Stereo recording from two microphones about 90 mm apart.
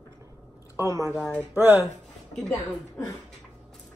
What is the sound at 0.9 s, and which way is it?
Speech, 35° right (ahead or behind).